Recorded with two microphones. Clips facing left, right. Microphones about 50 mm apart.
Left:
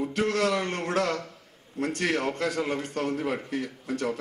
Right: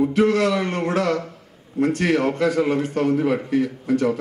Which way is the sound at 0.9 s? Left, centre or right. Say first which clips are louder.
Right 6 dB; right.